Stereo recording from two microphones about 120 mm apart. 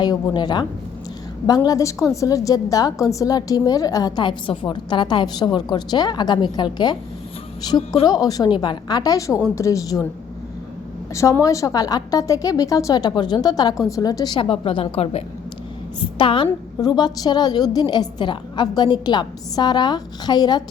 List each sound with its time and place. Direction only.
0.0 s a woman's voice: 35° left (ahead or behind)
11.1 s a woman's voice: 25° left (ahead or behind); by 15.2 s 55° left (ahead or behind)
16.1 s a woman's voice: 45° left (ahead or behind)